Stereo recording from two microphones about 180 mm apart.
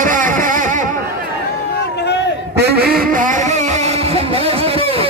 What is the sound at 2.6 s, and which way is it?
Quack, 65° right (ahead or behind).